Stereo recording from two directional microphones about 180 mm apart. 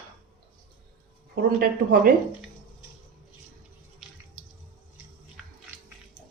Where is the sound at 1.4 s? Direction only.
50° right (ahead or behind).